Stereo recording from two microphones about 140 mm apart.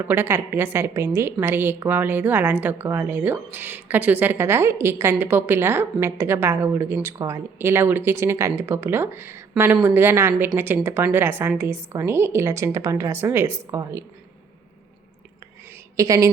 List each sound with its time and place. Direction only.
0.0 s a woman's voice: 15° right (ahead or behind)
16.0 s a woman's voice: 25° right (ahead or behind)